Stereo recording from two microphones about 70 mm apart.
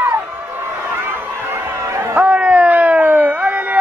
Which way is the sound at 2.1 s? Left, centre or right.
Centre.